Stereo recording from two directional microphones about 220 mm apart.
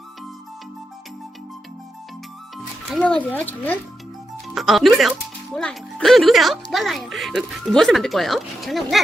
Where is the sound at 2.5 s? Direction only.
5° left (ahead or behind).